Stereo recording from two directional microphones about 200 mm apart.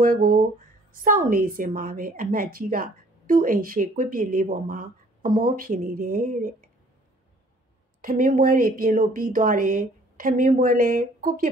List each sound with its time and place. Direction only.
0.0 s a woman's voice: 45° right (ahead or behind)
8.0 s a woman's voice: 45° right (ahead or behind)